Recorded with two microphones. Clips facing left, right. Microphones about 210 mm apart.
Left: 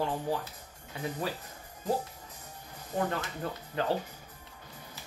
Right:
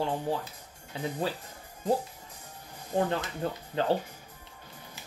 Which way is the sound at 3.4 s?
30° right (ahead or behind).